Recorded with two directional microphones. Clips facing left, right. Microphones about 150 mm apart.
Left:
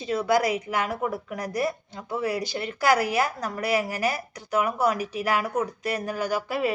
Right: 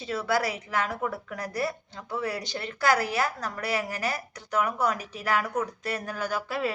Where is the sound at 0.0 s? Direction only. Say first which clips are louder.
Left 4 dB; 15° left (ahead or behind).